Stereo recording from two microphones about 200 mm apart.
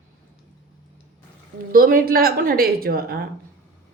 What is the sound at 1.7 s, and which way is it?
A woman's voice, 45° right (ahead or behind).